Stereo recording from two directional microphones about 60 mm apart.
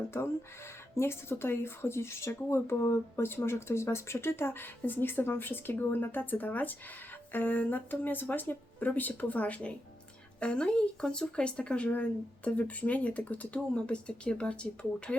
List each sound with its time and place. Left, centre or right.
0.9 s speech: left; by 15.1 s centre